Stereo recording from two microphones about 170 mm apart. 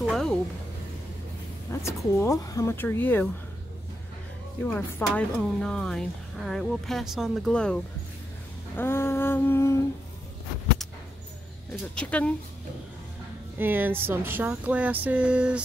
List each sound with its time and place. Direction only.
0.0 s a sound: centre (ahead or behind)
1.7 s speech: 15° left (ahead or behind)
2.2 s humming: 20° left (ahead or behind)
4.6 s speech: 10° left (ahead or behind)
8.7 s humming: 15° left (ahead or behind)
11.7 s humming: 5° left (ahead or behind)
13.6 s speech: 10° right (ahead or behind)